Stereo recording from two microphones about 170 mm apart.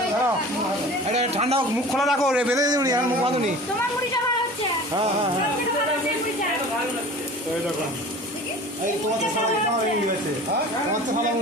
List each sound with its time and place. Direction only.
1.0 s speech: 40° right (ahead or behind)
1.9 s a man's voice: centre (ahead or behind)
2.6 s speech: 20° right (ahead or behind)